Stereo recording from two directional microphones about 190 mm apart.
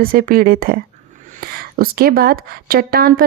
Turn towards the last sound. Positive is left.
turn(degrees=-50)  # may be behind; listen again after turning